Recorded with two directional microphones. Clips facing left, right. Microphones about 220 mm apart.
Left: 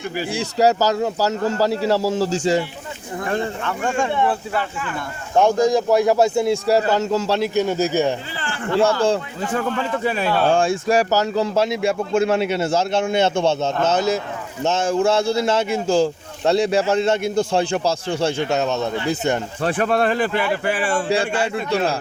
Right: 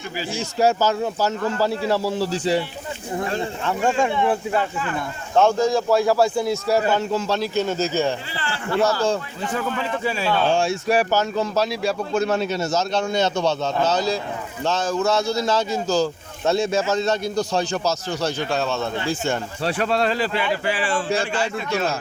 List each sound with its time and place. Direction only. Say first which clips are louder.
0.8 s speech: left 2 dB; 40° left (ahead or behind)
3.7 s speech: right 4 dB; 25° right (ahead or behind)
5.3 s speech: left 2 dB; 15° left (ahead or behind); by 7.3 s 40° left (ahead or behind)
7.3 s a man's voice: left 3 dB; 20° left (ahead or behind)
8.7 s speech: left 3 dB; 30° left (ahead or behind)
9.6 s speech: left 3 dB; 55° left (ahead or behind)
11.1 s speech: left 2 dB; 35° left (ahead or behind); by 19.4 s 20° left (ahead or behind)
19.6 s speech: left 3 dB; 50° left (ahead or behind)
21.7 s speech: left 3 dB; 35° left (ahead or behind)